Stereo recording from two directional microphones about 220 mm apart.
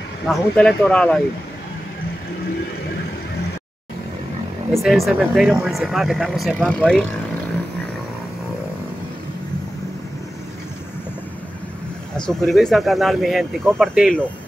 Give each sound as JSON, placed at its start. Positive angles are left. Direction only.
{"t": 0.3, "sound": "speech", "side_deg": 5}
{"t": 4.7, "sound": "speech", "side_deg": 0}
{"t": 12.2, "sound": "speech", "side_deg": 0}